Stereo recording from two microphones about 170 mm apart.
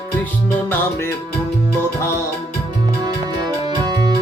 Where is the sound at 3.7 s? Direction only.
25° right (ahead or behind).